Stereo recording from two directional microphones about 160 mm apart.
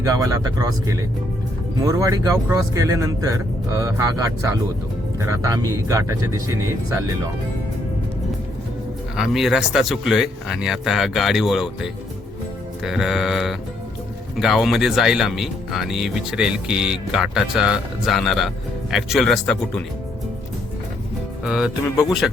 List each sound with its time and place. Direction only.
0.0 s speech: 20° right (ahead or behind)
9.1 s speech: centre (ahead or behind)
21.4 s speech: 5° right (ahead or behind)